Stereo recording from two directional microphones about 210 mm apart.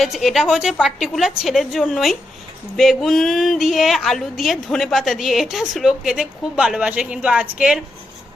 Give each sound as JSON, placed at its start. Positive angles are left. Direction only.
{"t": 0.0, "sound": "speech", "side_deg": 0}